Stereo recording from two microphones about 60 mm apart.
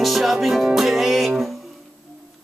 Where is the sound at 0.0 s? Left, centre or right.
Centre.